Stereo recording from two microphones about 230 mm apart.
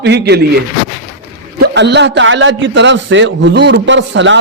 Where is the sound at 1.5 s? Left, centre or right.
Right.